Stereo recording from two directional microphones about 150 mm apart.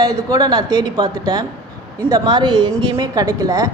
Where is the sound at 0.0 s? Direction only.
20° right (ahead or behind).